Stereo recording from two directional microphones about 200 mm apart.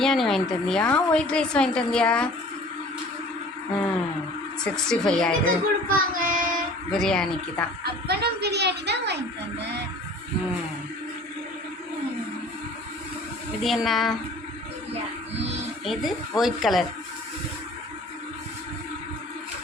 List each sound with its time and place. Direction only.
0.0 s a woman's voice: centre (ahead or behind)
4.6 s a woman's voice: 5° left (ahead or behind)
5.5 s speech: 45° right (ahead or behind)
6.9 s a woman's voice: 5° left (ahead or behind)
8.0 s a woman's voice: 55° right (ahead or behind)
13.6 s a woman's voice: centre (ahead or behind)
15.8 s a woman's voice: centre (ahead or behind)